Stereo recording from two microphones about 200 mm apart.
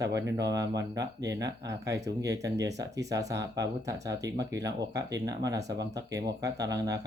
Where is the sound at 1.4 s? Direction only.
60° right (ahead or behind).